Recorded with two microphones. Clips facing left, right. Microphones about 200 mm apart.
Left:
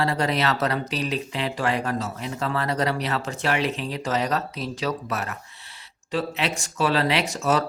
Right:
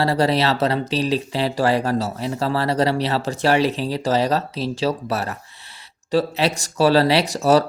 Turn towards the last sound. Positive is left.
turn(degrees=-35)  # may be behind; listen again after turning